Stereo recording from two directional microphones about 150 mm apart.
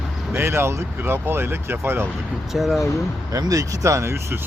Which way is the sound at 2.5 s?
Centre (ahead or behind).